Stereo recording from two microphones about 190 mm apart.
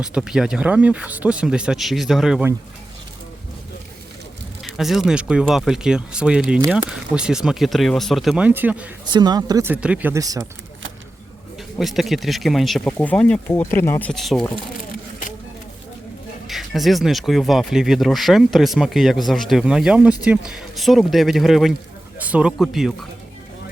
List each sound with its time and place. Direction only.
0.0 s speech: 5° right (ahead or behind)
4.6 s speech: centre (ahead or behind)
9.0 s speech: 20° right (ahead or behind)
11.8 s speech: centre (ahead or behind)
14.1 s speech: centre (ahead or behind)
16.5 s speech: centre (ahead or behind)